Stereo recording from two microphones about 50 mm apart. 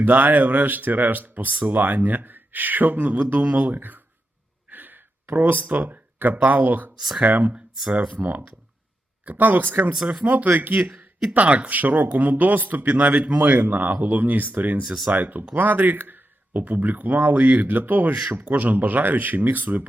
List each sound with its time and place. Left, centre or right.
0.0 s speech: right
4.7 s a sound: right
5.3 s speech: right
7.5 s speech: centre
8.1 s speech: right
9.9 s speech: centre
10.2 s speech: right
10.9 s a sound: centre
11.3 s speech: right